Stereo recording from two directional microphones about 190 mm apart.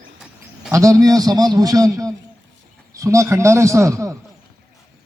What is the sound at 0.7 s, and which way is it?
A man's voice, 15° right (ahead or behind).